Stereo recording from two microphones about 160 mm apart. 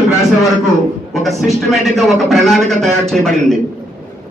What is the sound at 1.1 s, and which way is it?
A man's voice, centre (ahead or behind).